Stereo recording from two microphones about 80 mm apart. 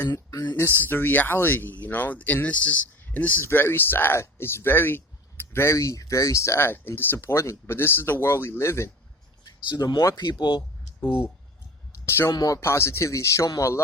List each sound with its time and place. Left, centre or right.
0.1 s speech: left
0.5 s speech: left
5.7 s speech: left
9.4 s speech: left
10.2 s speech: left
12.0 s speech: left
12.3 s speech: left
12.5 s speech: left